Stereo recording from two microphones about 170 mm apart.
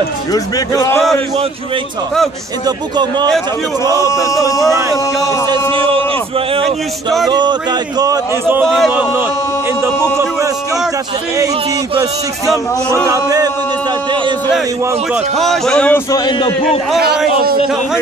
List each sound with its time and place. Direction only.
0.3 s a man's voice: 20° left (ahead or behind)
3.8 s a sound: 20° right (ahead or behind)
4.1 s a man's voice: 20° left (ahead or behind)
5.5 s a man's voice: 30° right (ahead or behind)
6.6 s speech: centre (ahead or behind)
7.2 s a sound: 25° right (ahead or behind)
8.7 s speech: centre (ahead or behind)
13.1 s a sound: 20° right (ahead or behind)
15.3 s speech: centre (ahead or behind)
16.1 s a man's voice: 25° left (ahead or behind)